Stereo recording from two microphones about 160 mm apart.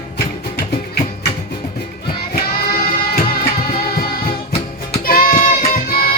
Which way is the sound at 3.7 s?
65° left (ahead or behind).